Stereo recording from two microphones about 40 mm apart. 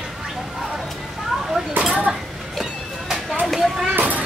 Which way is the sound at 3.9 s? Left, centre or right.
Right.